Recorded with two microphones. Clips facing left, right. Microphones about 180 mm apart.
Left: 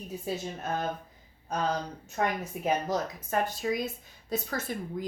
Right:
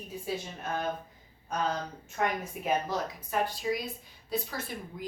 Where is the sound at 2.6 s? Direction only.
40° left (ahead or behind).